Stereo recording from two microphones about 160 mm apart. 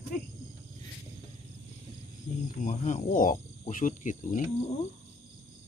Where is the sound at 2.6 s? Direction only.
50° left (ahead or behind).